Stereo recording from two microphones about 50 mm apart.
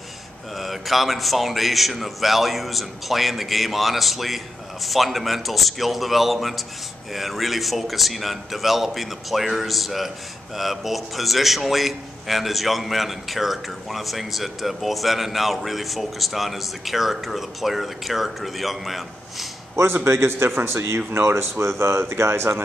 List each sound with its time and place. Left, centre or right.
0.6 s a man's voice: centre
19.7 s speech: right
20.1 s speech: right